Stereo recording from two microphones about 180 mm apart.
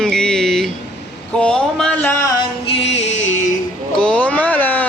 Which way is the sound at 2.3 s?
30° left (ahead or behind).